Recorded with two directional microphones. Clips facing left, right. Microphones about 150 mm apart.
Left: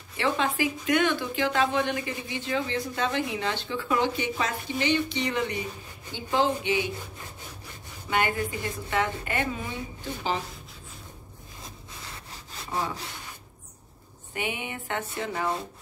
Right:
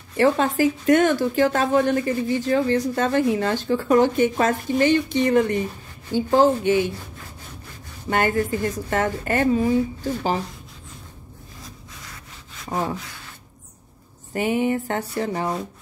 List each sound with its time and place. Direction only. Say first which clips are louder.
0.2 s a woman's voice: right 8 dB; 40° right (ahead or behind)
8.1 s a woman's voice: right 6 dB; 45° right (ahead or behind)
14.3 s a sound: right 12 dB; 40° right (ahead or behind)